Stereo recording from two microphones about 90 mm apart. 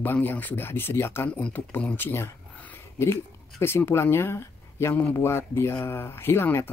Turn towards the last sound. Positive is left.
turn(degrees=25)  # may be behind; listen again after turning